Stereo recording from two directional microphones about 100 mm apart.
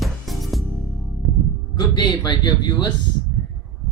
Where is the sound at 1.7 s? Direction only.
45° left (ahead or behind).